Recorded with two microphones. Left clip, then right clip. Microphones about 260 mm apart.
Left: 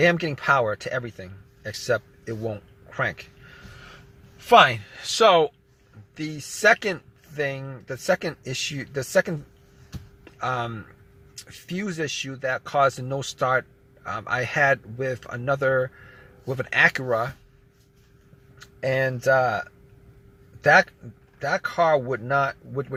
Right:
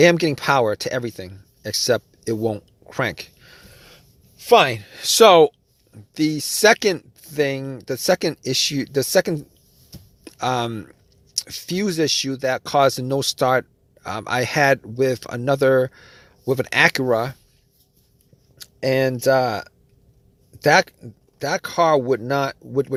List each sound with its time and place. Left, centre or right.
0.0 s speech: right
18.6 s speech: right